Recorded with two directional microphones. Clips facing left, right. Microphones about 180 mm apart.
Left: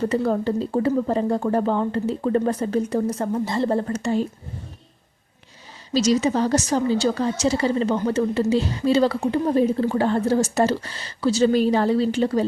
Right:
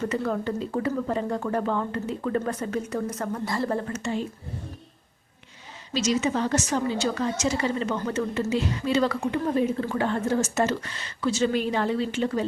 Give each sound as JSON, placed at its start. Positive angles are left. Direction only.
{"t": 0.0, "sound": "a woman's voice", "side_deg": 30}
{"t": 5.9, "sound": "a woman's voice", "side_deg": 35}